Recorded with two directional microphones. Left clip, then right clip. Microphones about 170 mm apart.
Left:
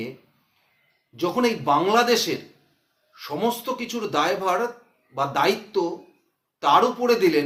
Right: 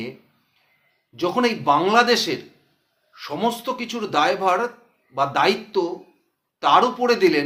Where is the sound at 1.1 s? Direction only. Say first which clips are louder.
Right 2 dB; 20° right (ahead or behind).